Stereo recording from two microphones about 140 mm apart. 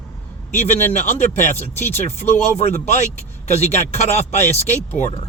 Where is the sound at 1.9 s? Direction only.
55° left (ahead or behind).